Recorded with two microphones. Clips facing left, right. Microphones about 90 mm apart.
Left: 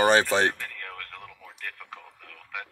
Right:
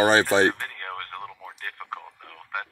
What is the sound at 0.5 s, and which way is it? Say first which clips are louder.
Radio: right 5 dB; 45° right (ahead or behind).